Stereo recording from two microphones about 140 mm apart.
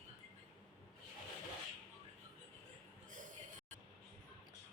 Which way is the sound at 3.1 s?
65° right (ahead or behind).